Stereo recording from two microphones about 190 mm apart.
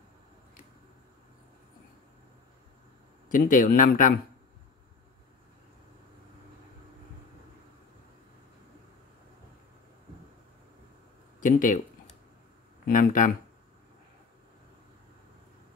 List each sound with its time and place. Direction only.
3.3 s speech: 45° left (ahead or behind)
11.4 s speech: 45° left (ahead or behind)
12.8 s speech: 45° left (ahead or behind)